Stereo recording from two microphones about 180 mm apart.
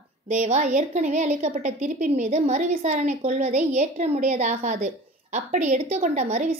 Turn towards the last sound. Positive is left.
turn(degrees=-45)  # may be behind; listen again after turning